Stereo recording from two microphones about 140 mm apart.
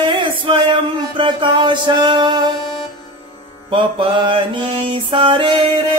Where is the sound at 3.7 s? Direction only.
35° right (ahead or behind).